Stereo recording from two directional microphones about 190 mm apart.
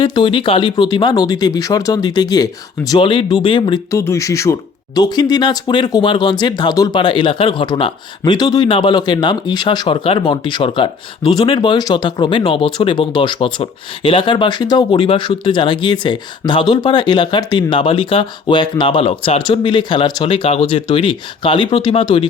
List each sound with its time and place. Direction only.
0.0 s speech: 25° left (ahead or behind)
3.9 s speech: 15° left (ahead or behind)